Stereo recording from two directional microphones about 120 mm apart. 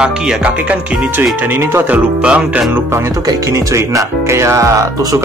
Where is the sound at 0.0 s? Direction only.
10° right (ahead or behind).